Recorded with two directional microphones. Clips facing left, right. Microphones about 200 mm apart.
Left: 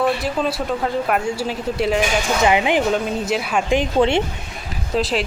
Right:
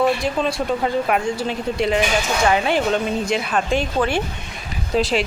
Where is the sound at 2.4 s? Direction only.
15° left (ahead or behind).